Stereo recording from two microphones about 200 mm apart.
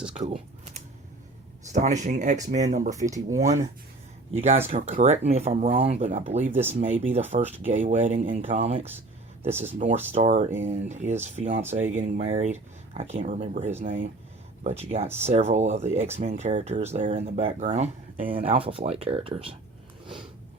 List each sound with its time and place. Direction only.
0.1 s typing: 30° right (ahead or behind)
1.7 s speech: 35° right (ahead or behind)
4.4 s speech: 30° right (ahead or behind)
6.4 s speech: 10° right (ahead or behind)
6.7 s speech: 35° right (ahead or behind)
18.3 s speech: 25° right (ahead or behind)